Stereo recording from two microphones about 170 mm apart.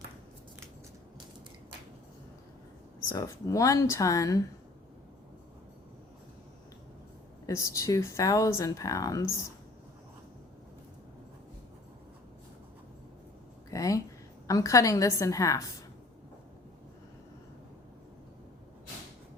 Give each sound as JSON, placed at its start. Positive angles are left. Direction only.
{"t": 3.1, "sound": "speech", "side_deg": 20}
{"t": 7.4, "sound": "speech", "side_deg": 20}
{"t": 13.7, "sound": "a sound", "side_deg": 20}
{"t": 14.4, "sound": "speech", "side_deg": 20}